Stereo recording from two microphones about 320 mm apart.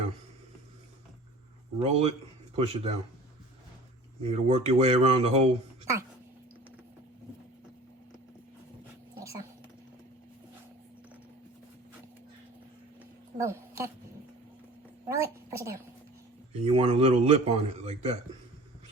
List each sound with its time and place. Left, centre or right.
1.8 s speech: centre
4.2 s speech: centre
13.4 s speech: centre
15.0 s a woman's voice: centre